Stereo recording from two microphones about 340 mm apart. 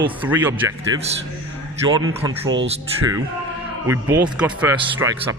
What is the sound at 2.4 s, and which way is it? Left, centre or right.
Speech, right.